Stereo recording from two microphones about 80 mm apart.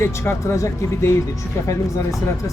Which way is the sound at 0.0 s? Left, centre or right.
Left.